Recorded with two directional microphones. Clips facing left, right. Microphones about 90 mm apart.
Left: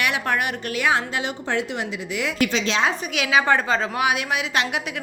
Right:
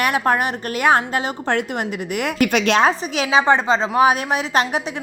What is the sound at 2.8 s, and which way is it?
A woman's voice, 35° right (ahead or behind).